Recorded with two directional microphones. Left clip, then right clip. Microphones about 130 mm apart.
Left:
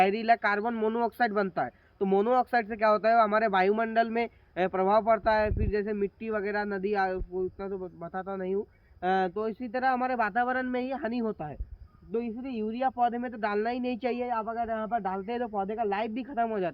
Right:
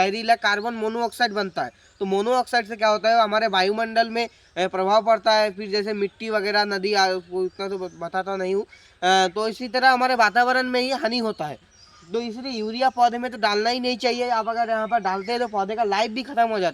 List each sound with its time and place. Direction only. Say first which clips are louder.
0.0 s speech: right 4 dB; 30° right (ahead or behind)
12.1 s speech: right 6 dB; 25° right (ahead or behind)